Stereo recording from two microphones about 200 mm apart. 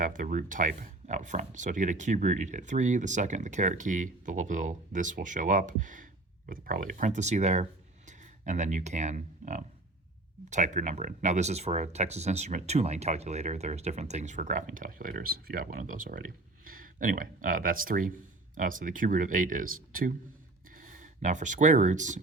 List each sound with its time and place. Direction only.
0.0 s speech: 40° right (ahead or behind)